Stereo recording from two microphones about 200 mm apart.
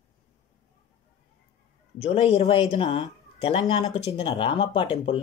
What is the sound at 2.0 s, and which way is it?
Speech, 30° left (ahead or behind).